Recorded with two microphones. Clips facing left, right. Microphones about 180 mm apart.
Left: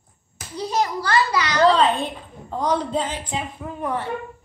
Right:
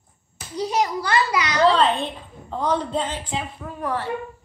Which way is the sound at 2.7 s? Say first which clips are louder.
Left 1 dB; centre (ahead or behind).